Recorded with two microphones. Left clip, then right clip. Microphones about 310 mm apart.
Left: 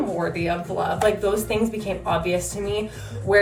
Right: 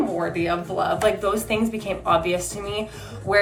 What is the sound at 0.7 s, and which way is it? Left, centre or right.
A woman's voice, centre.